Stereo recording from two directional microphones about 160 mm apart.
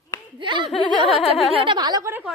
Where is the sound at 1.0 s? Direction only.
35° left (ahead or behind).